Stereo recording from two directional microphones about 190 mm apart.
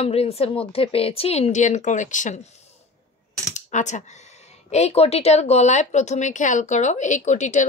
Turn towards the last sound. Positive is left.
turn(degrees=40)  # may be behind; listen again after turning